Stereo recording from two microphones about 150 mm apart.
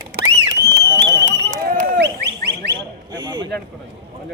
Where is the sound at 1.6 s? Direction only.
70° right (ahead or behind).